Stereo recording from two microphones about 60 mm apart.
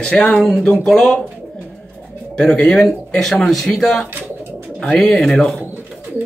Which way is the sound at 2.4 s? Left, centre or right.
Centre.